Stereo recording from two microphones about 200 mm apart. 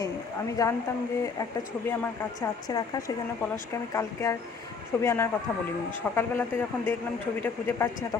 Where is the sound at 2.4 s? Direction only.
20° left (ahead or behind).